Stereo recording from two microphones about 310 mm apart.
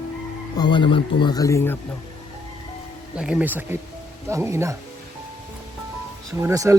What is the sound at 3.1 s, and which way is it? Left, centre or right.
Speech, centre.